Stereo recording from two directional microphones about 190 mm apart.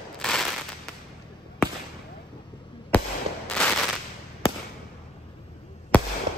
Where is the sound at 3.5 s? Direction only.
5° left (ahead or behind).